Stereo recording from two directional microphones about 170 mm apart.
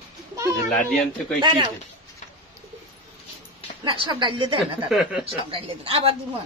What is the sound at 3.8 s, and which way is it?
Speech, 25° right (ahead or behind).